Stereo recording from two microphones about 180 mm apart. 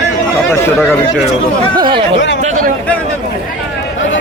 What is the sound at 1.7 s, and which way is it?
Speech, 25° right (ahead or behind).